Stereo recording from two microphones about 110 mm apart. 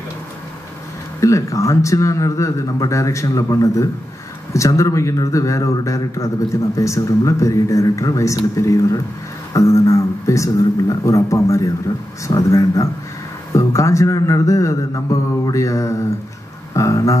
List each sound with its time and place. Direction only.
1.2 s a man's voice: 30° left (ahead or behind)